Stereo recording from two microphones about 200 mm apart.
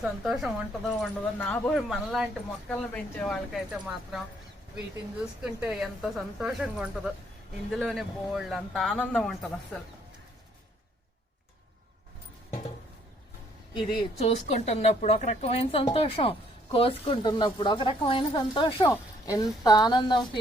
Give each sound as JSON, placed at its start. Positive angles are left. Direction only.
{"t": 0.0, "sound": "speech", "side_deg": 0}
{"t": 5.4, "sound": "speech", "side_deg": -5}
{"t": 13.7, "sound": "speech", "side_deg": 25}